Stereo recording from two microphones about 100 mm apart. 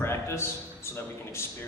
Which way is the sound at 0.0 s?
25° left (ahead or behind).